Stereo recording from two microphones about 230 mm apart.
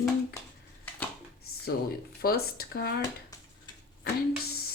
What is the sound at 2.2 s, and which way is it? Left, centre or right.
Speech, left.